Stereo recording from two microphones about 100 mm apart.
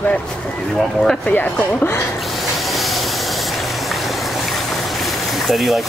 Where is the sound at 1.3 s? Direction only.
20° left (ahead or behind).